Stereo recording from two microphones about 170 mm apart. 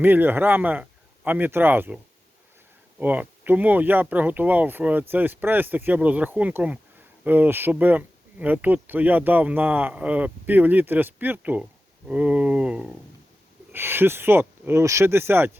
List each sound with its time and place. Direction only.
0.0 s speech: 10° right (ahead or behind)
3.0 s speech: 10° right (ahead or behind)